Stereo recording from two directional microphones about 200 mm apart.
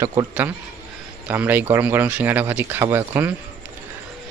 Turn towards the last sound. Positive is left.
turn(degrees=-10)  # may be behind; listen again after turning